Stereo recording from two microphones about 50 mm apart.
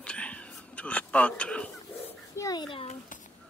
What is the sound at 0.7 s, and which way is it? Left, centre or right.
Speech, left.